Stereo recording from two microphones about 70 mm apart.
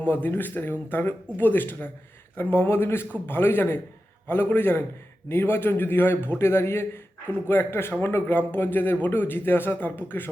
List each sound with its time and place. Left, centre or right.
0.0 s a man's voice: left